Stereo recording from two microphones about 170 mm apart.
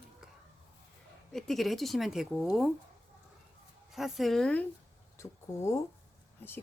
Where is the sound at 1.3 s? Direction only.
Centre (ahead or behind).